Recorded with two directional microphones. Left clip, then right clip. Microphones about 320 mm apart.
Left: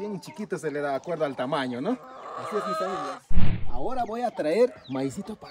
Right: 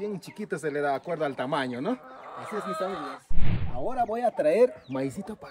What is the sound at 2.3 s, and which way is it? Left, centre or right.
Speech, left.